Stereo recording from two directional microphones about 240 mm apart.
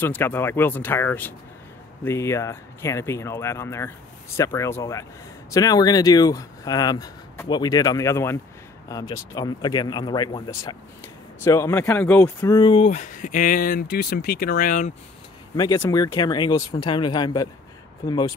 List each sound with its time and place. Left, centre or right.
0.0 s speech: centre; by 14.9 s left
15.5 s speech: centre